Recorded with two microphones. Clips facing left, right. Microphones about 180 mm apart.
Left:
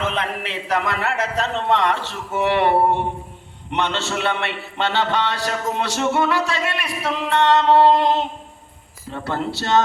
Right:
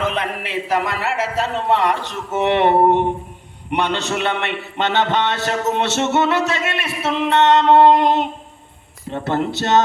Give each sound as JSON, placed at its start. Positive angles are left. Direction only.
{"t": 0.0, "sound": "a man's voice", "side_deg": -10}